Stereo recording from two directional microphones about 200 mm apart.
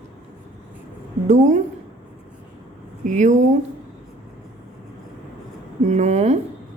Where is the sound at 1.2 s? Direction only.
35° right (ahead or behind).